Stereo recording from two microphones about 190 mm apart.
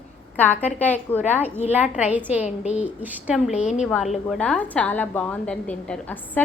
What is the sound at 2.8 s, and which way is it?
A woman's voice, 10° right (ahead or behind).